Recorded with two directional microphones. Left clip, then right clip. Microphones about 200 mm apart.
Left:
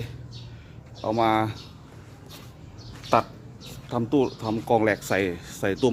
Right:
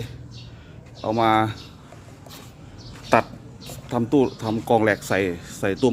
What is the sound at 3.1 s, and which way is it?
Speech, 15° right (ahead or behind).